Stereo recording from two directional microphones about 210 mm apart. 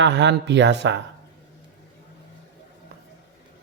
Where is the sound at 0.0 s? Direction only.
55° right (ahead or behind).